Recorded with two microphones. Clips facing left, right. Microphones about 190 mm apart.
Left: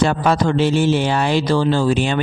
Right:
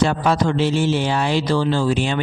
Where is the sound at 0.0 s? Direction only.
50° left (ahead or behind).